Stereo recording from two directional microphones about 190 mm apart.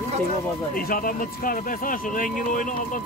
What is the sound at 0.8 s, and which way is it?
Speech, 50° left (ahead or behind).